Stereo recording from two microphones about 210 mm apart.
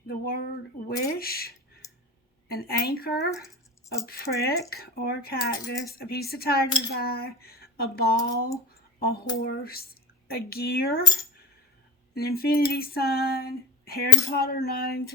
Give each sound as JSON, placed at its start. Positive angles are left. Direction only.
{"t": 0.1, "sound": "speech", "side_deg": 45}
{"t": 0.9, "sound": "a sound", "side_deg": 45}
{"t": 2.5, "sound": "speech", "side_deg": 45}